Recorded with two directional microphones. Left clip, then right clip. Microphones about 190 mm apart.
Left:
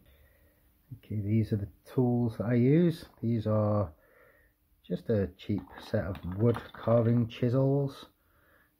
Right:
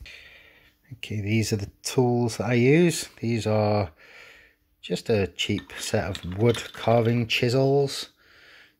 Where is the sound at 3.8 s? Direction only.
30° right (ahead or behind).